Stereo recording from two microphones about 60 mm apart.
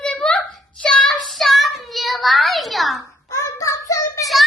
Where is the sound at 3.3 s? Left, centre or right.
Left.